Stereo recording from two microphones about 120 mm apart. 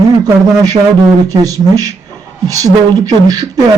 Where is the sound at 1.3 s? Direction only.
30° right (ahead or behind).